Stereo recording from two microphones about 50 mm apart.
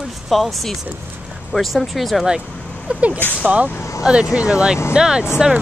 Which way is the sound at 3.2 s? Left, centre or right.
Left.